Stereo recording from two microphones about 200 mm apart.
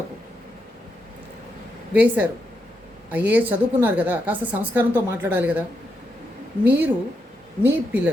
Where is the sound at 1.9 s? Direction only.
10° right (ahead or behind).